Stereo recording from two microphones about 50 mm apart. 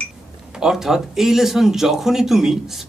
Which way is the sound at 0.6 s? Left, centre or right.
Centre.